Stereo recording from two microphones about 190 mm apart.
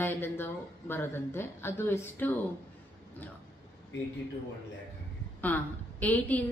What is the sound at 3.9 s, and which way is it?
Speech, 70° left (ahead or behind).